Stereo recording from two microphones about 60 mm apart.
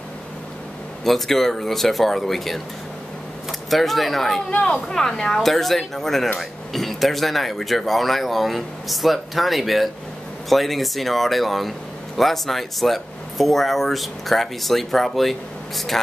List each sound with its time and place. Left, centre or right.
1.0 s speech: centre
3.7 s speech: centre
4.5 s speech: centre